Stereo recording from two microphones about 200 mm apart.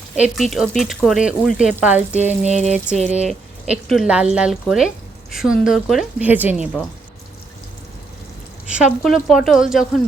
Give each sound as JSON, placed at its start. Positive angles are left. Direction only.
{"t": 0.2, "sound": "speech", "side_deg": 0}
{"t": 2.4, "sound": "a sound", "side_deg": -35}
{"t": 3.2, "sound": "speech", "side_deg": 0}
{"t": 8.6, "sound": "speech", "side_deg": -5}